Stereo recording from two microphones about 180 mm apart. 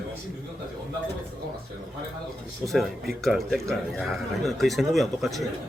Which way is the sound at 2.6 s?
Centre (ahead or behind).